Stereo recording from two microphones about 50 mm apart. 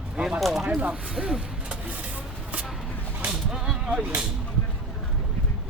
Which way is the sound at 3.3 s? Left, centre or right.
Centre.